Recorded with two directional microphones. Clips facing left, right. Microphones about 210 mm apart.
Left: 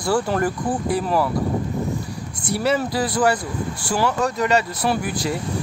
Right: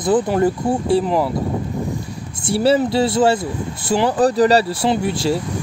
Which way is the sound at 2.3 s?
30° right (ahead or behind).